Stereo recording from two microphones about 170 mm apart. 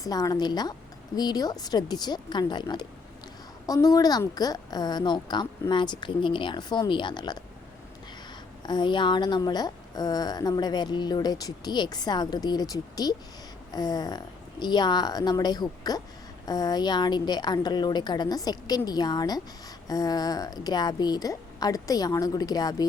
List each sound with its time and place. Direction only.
0.0 s a woman's voice: 20° left (ahead or behind)
8.6 s a woman's voice: 25° left (ahead or behind)